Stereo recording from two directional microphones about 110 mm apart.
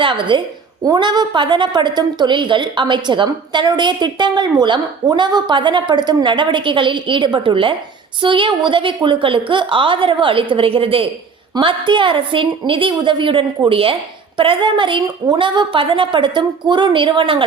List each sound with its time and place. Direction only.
0.0 s a woman's voice: 50° right (ahead or behind)